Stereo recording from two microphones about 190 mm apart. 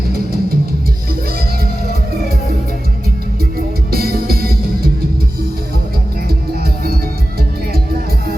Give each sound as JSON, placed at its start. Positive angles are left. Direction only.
{"t": 3.9, "sound": "music", "side_deg": -55}